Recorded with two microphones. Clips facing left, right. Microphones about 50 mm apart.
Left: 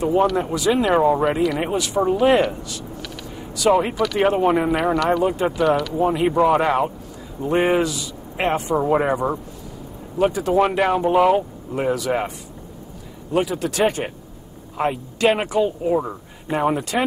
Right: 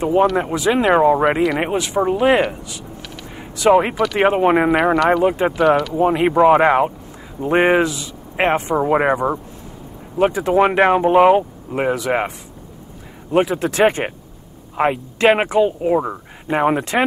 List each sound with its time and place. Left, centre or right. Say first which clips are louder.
0.0 s speech: right 3 dB; right
7.5 s speech: right 4 dB; right
7.8 s a man's voice: right 3 dB; right
13.3 s speech: right 4 dB; right